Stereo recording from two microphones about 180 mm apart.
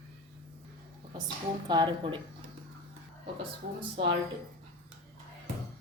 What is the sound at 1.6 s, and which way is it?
Speech, 25° right (ahead or behind).